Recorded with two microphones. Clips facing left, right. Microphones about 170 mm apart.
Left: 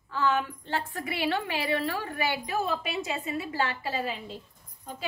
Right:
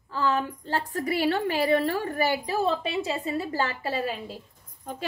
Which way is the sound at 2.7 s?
30° right (ahead or behind).